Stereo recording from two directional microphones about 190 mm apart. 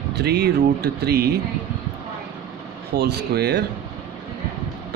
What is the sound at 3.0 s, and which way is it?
Speech, 60° right (ahead or behind).